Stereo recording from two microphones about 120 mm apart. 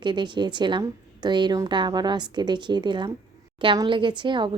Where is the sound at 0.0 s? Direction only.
40° right (ahead or behind).